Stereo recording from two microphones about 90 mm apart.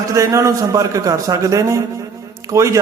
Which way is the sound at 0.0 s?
35° right (ahead or behind).